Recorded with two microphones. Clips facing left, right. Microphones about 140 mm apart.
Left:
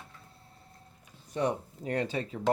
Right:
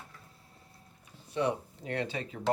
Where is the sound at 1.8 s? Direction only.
40° left (ahead or behind).